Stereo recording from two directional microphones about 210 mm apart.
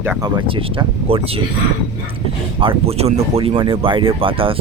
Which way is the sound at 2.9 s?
30° right (ahead or behind).